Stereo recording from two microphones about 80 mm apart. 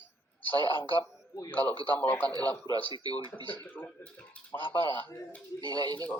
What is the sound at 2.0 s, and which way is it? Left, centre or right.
Speech, centre.